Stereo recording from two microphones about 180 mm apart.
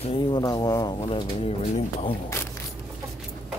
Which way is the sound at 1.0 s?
30° left (ahead or behind).